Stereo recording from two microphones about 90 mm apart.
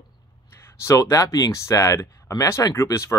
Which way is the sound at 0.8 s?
35° left (ahead or behind).